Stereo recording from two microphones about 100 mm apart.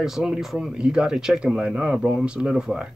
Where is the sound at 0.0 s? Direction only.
5° right (ahead or behind).